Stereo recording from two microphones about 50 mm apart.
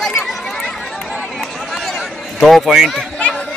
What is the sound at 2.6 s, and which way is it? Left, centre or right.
Speech, centre.